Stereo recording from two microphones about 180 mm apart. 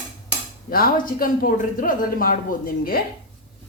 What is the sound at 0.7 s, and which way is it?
Speech, 55° left (ahead or behind).